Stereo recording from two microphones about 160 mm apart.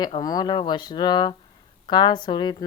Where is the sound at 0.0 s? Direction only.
25° left (ahead or behind).